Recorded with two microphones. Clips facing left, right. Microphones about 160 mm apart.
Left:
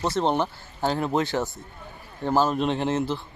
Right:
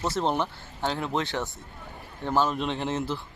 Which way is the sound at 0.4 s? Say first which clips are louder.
Left 4 dB; 40° left (ahead or behind).